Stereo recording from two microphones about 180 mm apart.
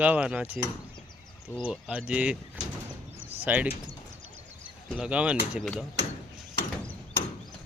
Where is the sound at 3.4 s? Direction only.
10° right (ahead or behind).